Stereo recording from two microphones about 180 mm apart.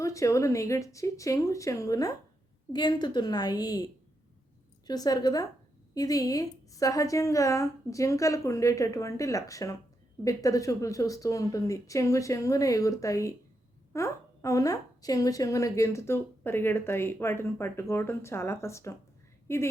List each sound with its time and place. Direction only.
0.0 s a woman's voice: 15° left (ahead or behind)